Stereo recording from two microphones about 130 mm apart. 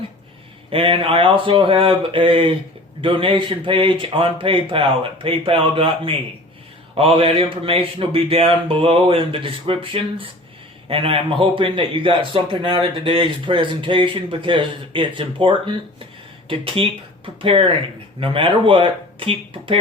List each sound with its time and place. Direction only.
0.7 s a man's voice: 45° right (ahead or behind)